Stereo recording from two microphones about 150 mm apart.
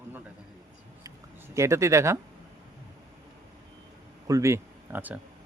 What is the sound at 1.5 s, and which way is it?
Speech, 20° right (ahead or behind).